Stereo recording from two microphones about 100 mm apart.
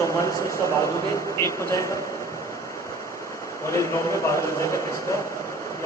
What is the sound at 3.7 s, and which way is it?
A man's voice, 30° left (ahead or behind).